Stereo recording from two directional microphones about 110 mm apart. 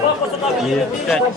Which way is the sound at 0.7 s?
Centre (ahead or behind).